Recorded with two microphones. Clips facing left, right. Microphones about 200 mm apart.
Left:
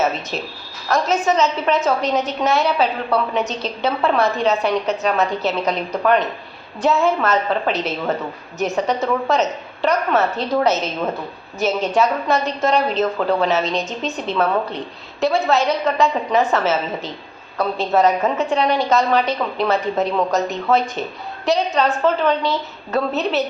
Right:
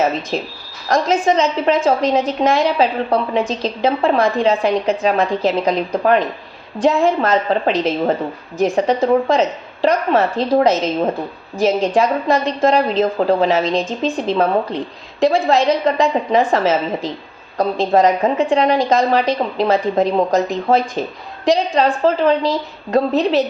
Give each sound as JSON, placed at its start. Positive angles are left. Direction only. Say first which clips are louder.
{"t": 0.9, "sound": "a woman's voice", "louder": "right 3 dB", "side_deg": -30}